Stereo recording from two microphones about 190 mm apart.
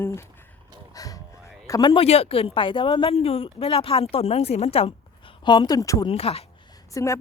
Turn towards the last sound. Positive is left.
turn(degrees=15)  # may be behind; listen again after turning